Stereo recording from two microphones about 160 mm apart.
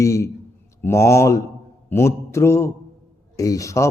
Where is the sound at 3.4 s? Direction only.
20° left (ahead or behind).